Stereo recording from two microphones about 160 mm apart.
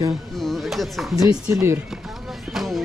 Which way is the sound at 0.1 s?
Centre (ahead or behind).